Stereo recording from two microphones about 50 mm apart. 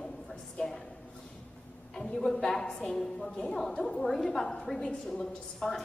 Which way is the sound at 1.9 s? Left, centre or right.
Centre.